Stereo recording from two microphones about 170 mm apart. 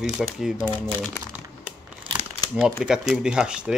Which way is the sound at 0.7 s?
10° left (ahead or behind).